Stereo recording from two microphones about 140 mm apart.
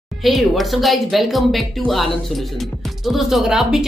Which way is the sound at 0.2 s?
Centre (ahead or behind).